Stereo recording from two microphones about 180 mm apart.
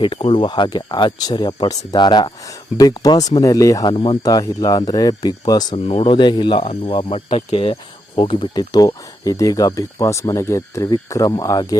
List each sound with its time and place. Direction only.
0.0 s speech: 30° left (ahead or behind)
5.7 s speech: 35° left (ahead or behind)